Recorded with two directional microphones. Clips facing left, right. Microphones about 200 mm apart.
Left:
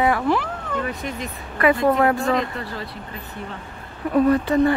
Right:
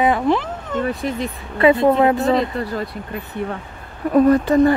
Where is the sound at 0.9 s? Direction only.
35° right (ahead or behind).